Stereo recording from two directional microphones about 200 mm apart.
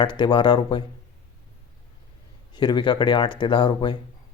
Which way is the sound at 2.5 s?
20° left (ahead or behind).